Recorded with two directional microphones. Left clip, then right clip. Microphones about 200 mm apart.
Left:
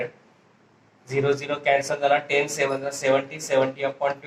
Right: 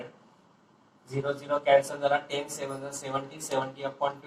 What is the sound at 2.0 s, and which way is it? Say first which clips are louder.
Speech: left 7 dB; 35° left (ahead or behind).